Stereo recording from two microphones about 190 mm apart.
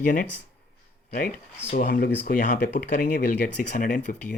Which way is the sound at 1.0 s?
45° left (ahead or behind).